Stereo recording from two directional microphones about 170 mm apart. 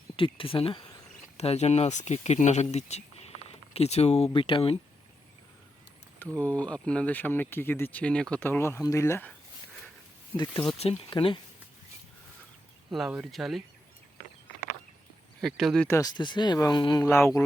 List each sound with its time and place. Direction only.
0.2 s speech: 30° left (ahead or behind)
1.4 s speech: 40° left (ahead or behind)
6.4 s speech: 5° left (ahead or behind)
10.7 s speech: 35° left (ahead or behind)
12.9 s speech: 5° right (ahead or behind)
15.4 s speech: centre (ahead or behind)
15.9 s speech: 20° left (ahead or behind)
17.0 s speech: 15° left (ahead or behind)